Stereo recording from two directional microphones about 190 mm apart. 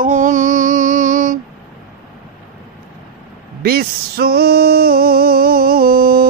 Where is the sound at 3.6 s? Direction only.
55° right (ahead or behind).